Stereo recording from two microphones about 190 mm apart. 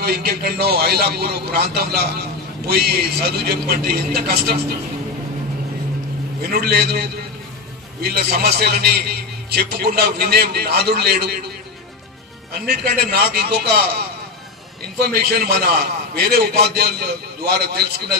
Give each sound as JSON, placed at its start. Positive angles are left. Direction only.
{"t": 0.0, "sound": "a man's voice", "side_deg": -55}
{"t": 6.5, "sound": "a man's voice", "side_deg": -55}
{"t": 12.5, "sound": "a man's voice", "side_deg": -55}
{"t": 15.0, "sound": "a man's voice", "side_deg": -55}